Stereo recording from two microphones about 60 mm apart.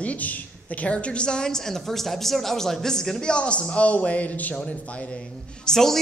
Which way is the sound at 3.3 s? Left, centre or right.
Centre.